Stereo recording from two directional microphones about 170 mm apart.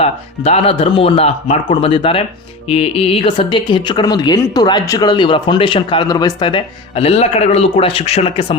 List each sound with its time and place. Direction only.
0.0 s speech: 35° left (ahead or behind)